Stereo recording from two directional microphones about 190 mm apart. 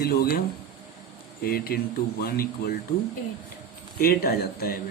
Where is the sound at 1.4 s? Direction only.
50° left (ahead or behind).